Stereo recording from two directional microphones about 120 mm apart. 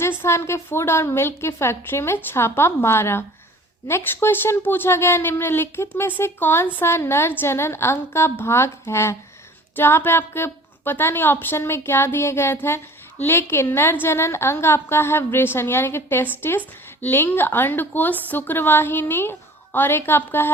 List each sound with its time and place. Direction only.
0.0 s a woman's voice: 20° left (ahead or behind)